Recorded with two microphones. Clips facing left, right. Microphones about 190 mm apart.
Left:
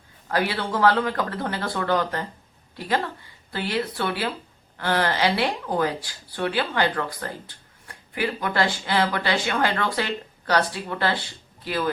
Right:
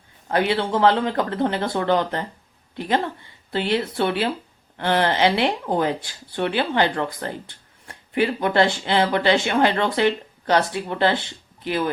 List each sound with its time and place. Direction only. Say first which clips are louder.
0.3 s a woman's voice: right 4 dB; 25° right (ahead or behind)